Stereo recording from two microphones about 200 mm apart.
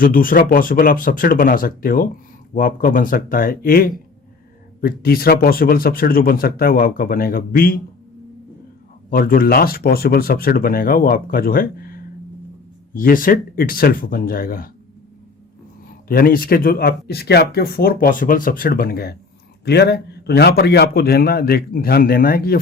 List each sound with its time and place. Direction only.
0.0 s speech: 45° left (ahead or behind)
9.0 s speech: 45° left (ahead or behind)
16.0 s speech: 50° left (ahead or behind)